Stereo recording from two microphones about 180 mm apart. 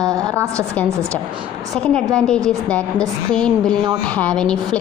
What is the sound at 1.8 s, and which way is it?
A woman's voice, 5° left (ahead or behind).